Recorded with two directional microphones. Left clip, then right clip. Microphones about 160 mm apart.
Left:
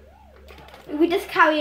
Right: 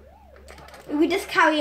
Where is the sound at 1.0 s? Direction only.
90° right.